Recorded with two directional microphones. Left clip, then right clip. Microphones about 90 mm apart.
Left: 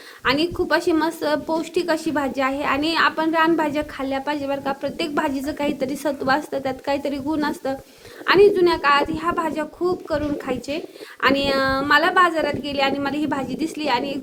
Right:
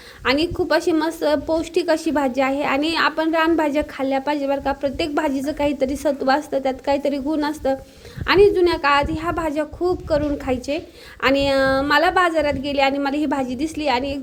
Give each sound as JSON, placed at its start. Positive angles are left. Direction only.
{"t": 0.3, "sound": "a woman's voice", "side_deg": -35}